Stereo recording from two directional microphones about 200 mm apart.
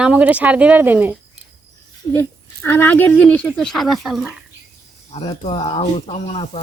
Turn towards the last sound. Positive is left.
turn(degrees=30)  # may be behind; listen again after turning